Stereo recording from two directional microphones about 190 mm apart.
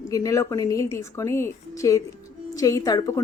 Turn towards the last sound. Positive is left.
turn(degrees=15)  # may be behind; listen again after turning